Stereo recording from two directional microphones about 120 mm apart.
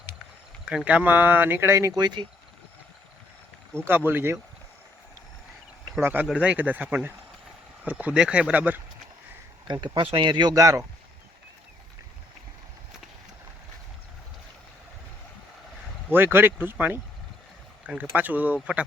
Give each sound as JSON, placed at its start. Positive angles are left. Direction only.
{"t": 0.9, "sound": "speech", "side_deg": -10}
{"t": 2.0, "sound": "speech", "side_deg": -35}
{"t": 3.8, "sound": "speech", "side_deg": -15}
{"t": 6.0, "sound": "speech", "side_deg": -15}
{"t": 9.6, "sound": "speech", "side_deg": -35}
{"t": 16.0, "sound": "speech", "side_deg": -15}
{"t": 18.0, "sound": "speech", "side_deg": -15}